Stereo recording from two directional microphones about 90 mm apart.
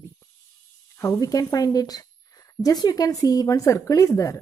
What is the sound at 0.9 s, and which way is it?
Speech, 30° left (ahead or behind).